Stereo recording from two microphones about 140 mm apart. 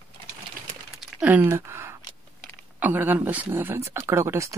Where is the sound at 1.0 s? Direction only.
10° right (ahead or behind).